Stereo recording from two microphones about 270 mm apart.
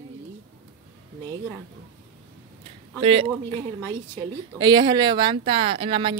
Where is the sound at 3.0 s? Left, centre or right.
Right.